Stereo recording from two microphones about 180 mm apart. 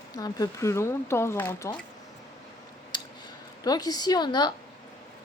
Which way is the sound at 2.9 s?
25° left (ahead or behind).